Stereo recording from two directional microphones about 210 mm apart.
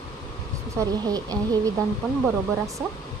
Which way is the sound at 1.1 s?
20° right (ahead or behind).